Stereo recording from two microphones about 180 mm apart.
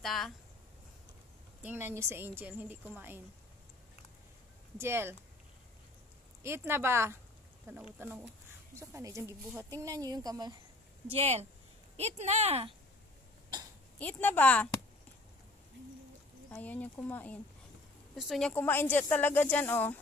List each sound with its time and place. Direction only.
0.0 s a sound: centre (ahead or behind)
1.6 s speech: 10° right (ahead or behind)
4.7 s speech: 15° right (ahead or behind)
6.4 s speech: 15° right (ahead or behind)
11.1 s speech: 35° right (ahead or behind)
13.9 s speech: 10° left (ahead or behind)
16.5 s speech: 10° left (ahead or behind)
18.1 s speech: centre (ahead or behind)